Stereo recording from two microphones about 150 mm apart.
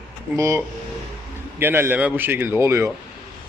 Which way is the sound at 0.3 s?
20° right (ahead or behind).